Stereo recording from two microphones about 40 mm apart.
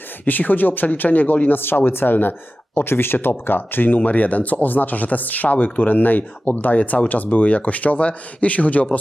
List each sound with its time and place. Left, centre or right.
0.3 s speech: left
2.7 s speech: left